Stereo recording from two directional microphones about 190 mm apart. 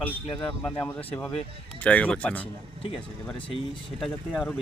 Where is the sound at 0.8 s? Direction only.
5° left (ahead or behind).